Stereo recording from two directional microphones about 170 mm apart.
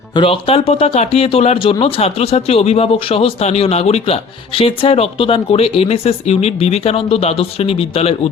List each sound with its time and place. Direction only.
0.1 s speech: 30° left (ahead or behind)